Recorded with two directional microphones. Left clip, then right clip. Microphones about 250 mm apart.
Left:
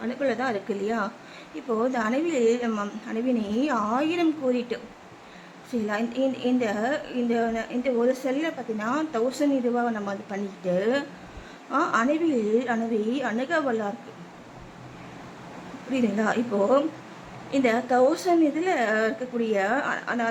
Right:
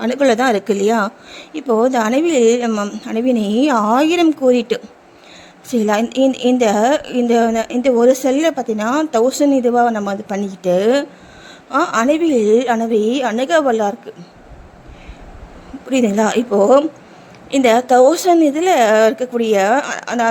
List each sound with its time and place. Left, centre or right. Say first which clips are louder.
0.0 s a woman's voice: right 13 dB; right
15.9 s a woman's voice: right 10 dB; right